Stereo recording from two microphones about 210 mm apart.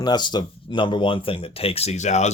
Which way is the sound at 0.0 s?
20° left (ahead or behind).